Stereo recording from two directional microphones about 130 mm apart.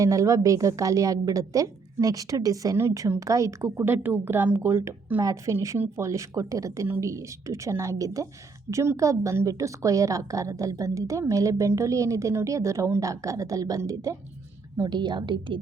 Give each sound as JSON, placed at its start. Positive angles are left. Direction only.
{"t": 0.0, "sound": "a woman's voice", "side_deg": -25}